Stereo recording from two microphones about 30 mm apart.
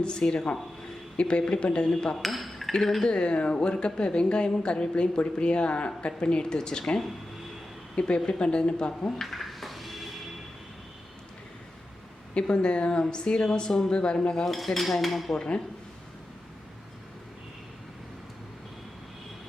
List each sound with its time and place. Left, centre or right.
0.0 s a woman's voice: left
2.1 s dishes: centre
3.0 s speech: left
3.3 s a woman's voice: left
7.9 s a woman's voice: left
9.2 s a sound: centre
12.3 s a woman's voice: left
13.9 s a woman's voice: left
14.4 s dishes: centre